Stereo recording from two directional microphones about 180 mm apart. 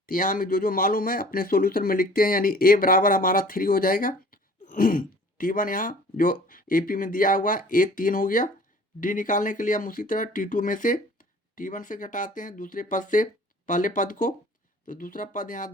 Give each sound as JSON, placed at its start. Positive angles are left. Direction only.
{"t": 0.0, "sound": "speech", "side_deg": 50}